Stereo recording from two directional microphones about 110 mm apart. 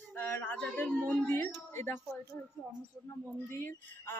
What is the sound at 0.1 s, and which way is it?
A woman's voice, 20° left (ahead or behind).